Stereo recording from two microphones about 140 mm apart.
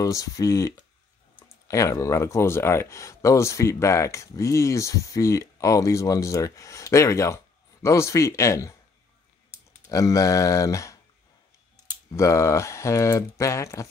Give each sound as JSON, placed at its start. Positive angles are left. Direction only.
{"t": 0.0, "sound": "speech", "side_deg": 25}
{"t": 9.8, "sound": "speech", "side_deg": 25}
{"t": 12.2, "sound": "speech", "side_deg": 20}